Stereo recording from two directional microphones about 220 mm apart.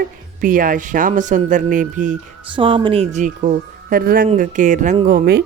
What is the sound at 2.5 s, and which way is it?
Speech, 25° right (ahead or behind).